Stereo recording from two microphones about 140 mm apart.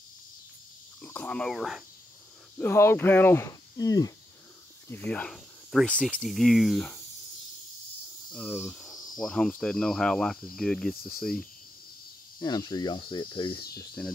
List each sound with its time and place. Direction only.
1.0 s speech: 10° left (ahead or behind)
2.6 s speech: 15° left (ahead or behind)
4.8 s speech: 10° left (ahead or behind)
5.9 s cricket: 10° left (ahead or behind)
8.3 s speech: centre (ahead or behind)
9.1 s cricket: centre (ahead or behind)
12.4 s speech: 30° left (ahead or behind)